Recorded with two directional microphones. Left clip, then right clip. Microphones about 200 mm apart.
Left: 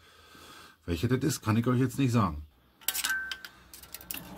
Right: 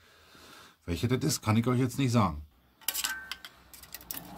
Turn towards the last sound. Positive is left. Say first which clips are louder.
# left 4 dB
turn(degrees=10)  # may be behind; listen again after turning